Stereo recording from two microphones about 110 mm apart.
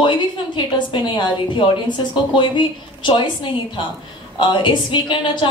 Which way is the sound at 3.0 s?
45° left (ahead or behind).